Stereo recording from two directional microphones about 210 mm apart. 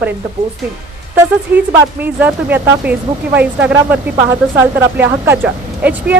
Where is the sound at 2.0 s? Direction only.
10° right (ahead or behind).